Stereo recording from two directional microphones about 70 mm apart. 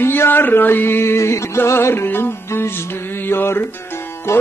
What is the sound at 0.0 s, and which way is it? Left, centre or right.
Music, left.